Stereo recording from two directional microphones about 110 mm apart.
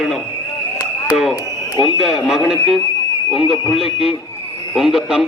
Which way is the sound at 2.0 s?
5° right (ahead or behind).